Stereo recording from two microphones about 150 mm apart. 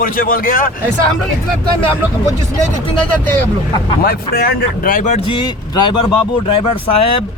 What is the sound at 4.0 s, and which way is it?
Speech, 90° left.